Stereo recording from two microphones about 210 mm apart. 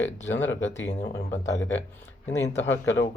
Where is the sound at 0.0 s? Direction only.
65° left (ahead or behind).